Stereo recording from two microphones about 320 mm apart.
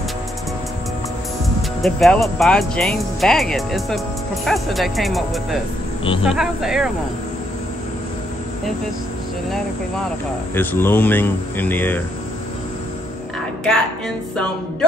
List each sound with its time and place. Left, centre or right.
1.8 s speech: centre
10.5 s speech: centre
13.7 s speech: centre